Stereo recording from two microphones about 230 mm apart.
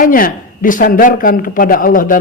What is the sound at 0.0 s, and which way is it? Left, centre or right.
A man's voice, left.